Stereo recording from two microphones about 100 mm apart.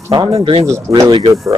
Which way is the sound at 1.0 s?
50° right (ahead or behind).